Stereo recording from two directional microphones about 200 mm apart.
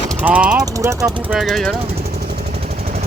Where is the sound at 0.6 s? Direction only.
15° right (ahead or behind).